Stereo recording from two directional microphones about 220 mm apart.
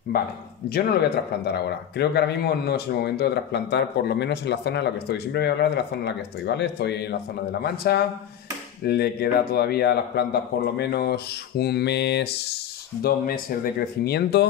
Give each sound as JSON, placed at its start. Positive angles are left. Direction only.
{"t": 0.7, "sound": "speech", "side_deg": 45}